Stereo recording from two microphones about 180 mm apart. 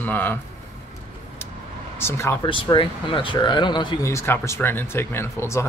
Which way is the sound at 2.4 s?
30° left (ahead or behind).